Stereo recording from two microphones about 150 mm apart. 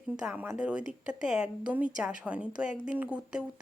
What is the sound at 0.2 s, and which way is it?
A woman's voice, 5° right (ahead or behind).